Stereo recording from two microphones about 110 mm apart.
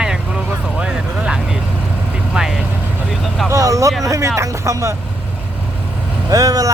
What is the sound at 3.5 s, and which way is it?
Speech, 30° right (ahead or behind).